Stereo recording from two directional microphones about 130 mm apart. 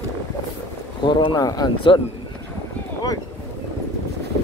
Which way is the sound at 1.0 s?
35° left (ahead or behind).